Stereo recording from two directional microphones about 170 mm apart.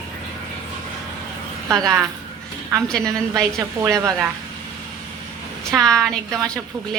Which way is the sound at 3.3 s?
20° right (ahead or behind).